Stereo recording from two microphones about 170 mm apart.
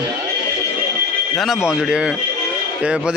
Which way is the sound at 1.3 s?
Centre (ahead or behind).